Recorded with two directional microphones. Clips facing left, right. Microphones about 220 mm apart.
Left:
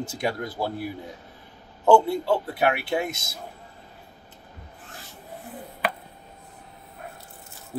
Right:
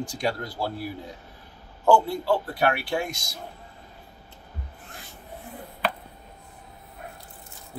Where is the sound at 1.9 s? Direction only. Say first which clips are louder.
Left 2 dB; 20° left (ahead or behind).